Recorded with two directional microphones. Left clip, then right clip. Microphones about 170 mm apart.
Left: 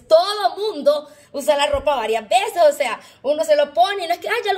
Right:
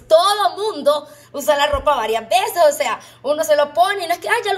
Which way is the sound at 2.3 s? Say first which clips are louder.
Right 1 dB; 15° left (ahead or behind).